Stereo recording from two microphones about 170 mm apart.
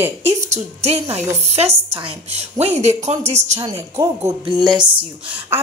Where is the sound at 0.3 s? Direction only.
40° right (ahead or behind).